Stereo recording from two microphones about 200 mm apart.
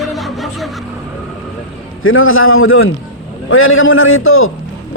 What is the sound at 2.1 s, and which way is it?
A man's voice, 90° left.